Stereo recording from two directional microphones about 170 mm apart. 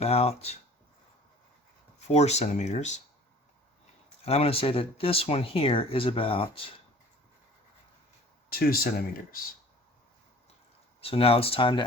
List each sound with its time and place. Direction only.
0.0 s speech: 35° left (ahead or behind)
2.1 s speech: 40° left (ahead or behind)
4.3 s speech: 35° left (ahead or behind)
8.4 s speech: 60° left (ahead or behind)
11.0 s speech: 35° left (ahead or behind)